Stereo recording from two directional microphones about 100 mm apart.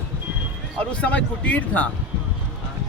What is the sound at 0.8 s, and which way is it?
Speech, 15° left (ahead or behind).